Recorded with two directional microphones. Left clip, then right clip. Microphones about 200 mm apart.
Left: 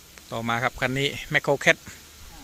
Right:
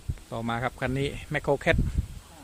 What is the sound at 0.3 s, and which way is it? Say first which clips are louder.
Speech: left 5 dB; 5° right (ahead or behind).